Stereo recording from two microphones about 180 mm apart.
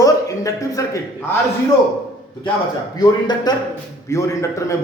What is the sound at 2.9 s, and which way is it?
A man's voice, 25° left (ahead or behind).